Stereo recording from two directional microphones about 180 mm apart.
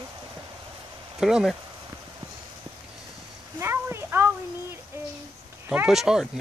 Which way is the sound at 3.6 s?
15° right (ahead or behind).